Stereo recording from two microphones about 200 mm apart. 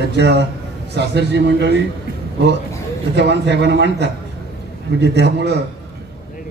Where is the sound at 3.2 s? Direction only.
60° right (ahead or behind).